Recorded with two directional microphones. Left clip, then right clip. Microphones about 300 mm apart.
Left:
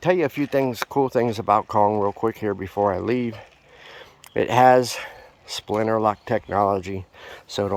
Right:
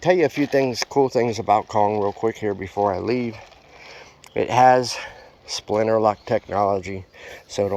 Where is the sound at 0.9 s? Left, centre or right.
Left.